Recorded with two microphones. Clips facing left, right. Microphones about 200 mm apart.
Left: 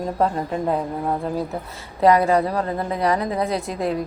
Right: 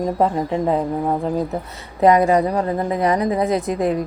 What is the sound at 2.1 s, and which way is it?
A woman's voice, 20° right (ahead or behind).